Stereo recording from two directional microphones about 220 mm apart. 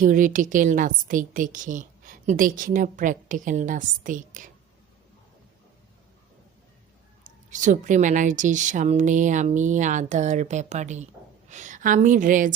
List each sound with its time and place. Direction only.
0.0 s a woman's voice: 35° right (ahead or behind)
7.3 s a woman's voice: 35° right (ahead or behind)